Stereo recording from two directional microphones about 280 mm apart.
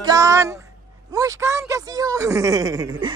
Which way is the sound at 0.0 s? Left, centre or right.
Centre.